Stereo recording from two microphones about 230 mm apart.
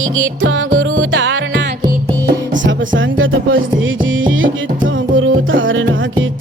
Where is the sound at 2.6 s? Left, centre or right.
Right.